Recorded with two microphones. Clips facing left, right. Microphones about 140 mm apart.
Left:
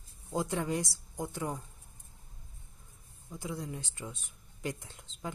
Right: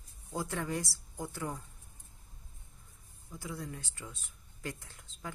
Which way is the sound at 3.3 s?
20° left (ahead or behind).